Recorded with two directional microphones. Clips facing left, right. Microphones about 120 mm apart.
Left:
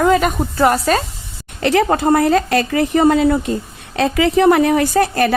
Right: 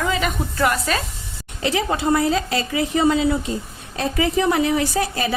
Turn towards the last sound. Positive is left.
turn(degrees=60)  # may be behind; listen again after turning